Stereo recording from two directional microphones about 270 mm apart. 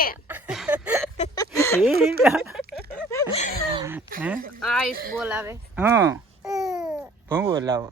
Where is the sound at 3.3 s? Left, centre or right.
Left.